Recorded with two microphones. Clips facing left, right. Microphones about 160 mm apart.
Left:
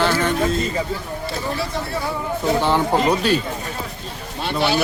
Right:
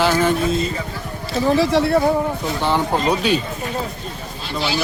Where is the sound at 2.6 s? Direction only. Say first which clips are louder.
Right 2 dB; 10° left (ahead or behind).